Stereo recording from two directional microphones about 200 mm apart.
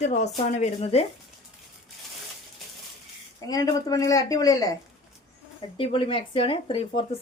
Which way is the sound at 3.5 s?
20° left (ahead or behind).